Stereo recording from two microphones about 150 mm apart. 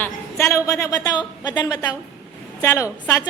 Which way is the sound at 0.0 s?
15° left (ahead or behind).